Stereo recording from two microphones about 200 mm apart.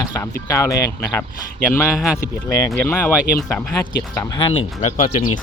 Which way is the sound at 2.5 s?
10° left (ahead or behind).